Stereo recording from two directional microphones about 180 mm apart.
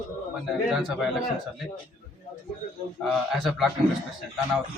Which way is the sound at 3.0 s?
Centre (ahead or behind).